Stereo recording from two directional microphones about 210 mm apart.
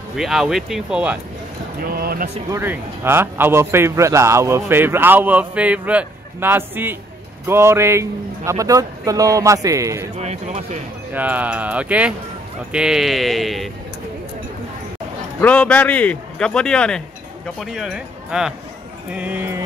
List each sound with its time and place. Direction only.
0.1 s a man's voice: centre (ahead or behind)
1.8 s speech: 45° right (ahead or behind)
2.5 s a man's voice: 10° right (ahead or behind)
10.1 s speech: 30° right (ahead or behind)
11.1 s a man's voice: 5° right (ahead or behind)
15.4 s a man's voice: 5° left (ahead or behind); by 19.6 s 10° right (ahead or behind)